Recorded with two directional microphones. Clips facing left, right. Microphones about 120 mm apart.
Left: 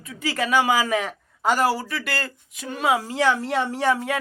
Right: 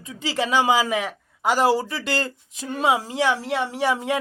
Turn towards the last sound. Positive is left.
turn(degrees=-20)  # may be behind; listen again after turning